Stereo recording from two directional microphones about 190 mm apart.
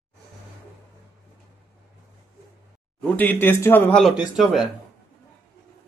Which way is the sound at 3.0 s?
10° left (ahead or behind).